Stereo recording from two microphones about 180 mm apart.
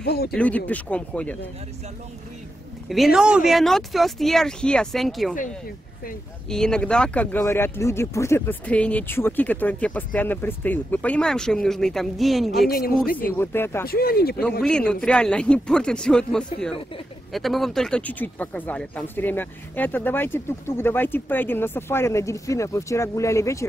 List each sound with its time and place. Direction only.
0.0 s speech: 65° left (ahead or behind)
0.3 s speech: 10° left (ahead or behind)
2.9 s speech: centre (ahead or behind)
6.5 s speech: 5° left (ahead or behind)
12.6 s speech: 55° left (ahead or behind)
13.4 s speech: 10° left (ahead or behind)
13.8 s speech: 60° left (ahead or behind)
14.6 s speech: 5° left (ahead or behind)